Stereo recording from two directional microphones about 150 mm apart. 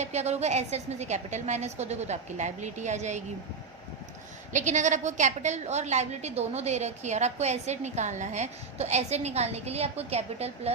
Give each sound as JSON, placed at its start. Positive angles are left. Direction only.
{"t": 0.0, "sound": "a woman's voice", "side_deg": -50}
{"t": 4.5, "sound": "a woman's voice", "side_deg": -55}